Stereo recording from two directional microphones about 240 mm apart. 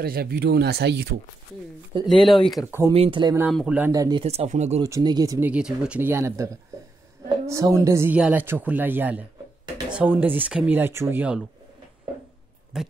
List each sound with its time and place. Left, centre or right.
0.0 s speech: right
2.0 s speech: centre
2.9 s speech: right
3.4 s speech: centre; by 4.8 s right
4.8 s speech: centre
12.7 s speech: centre